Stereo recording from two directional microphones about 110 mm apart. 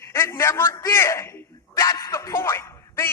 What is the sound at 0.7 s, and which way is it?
A man's voice, 25° left (ahead or behind).